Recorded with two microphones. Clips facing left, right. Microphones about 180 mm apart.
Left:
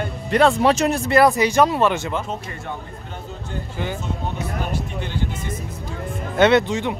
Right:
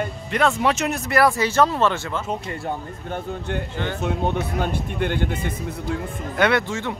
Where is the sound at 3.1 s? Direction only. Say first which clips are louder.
Right 7 dB; 65° right (ahead or behind).